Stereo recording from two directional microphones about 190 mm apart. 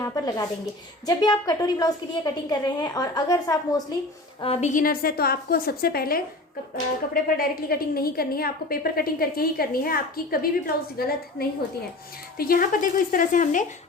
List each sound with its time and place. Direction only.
0.0 s a sound: 20° left (ahead or behind)
1.0 s a woman's voice: 20° left (ahead or behind)
4.4 s a woman's voice: 30° left (ahead or behind)